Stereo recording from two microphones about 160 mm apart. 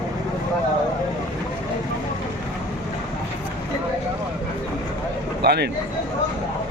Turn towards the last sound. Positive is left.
turn(degrees=-90)